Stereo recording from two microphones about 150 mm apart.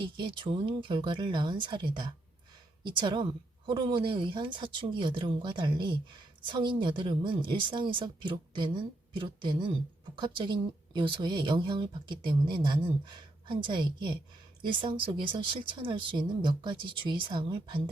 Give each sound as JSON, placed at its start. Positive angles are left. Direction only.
{"t": 0.2, "sound": "speech", "side_deg": -35}